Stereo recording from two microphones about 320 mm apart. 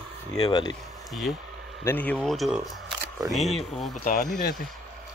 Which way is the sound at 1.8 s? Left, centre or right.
Centre.